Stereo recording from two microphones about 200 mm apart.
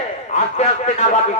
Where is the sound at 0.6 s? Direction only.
35° left (ahead or behind).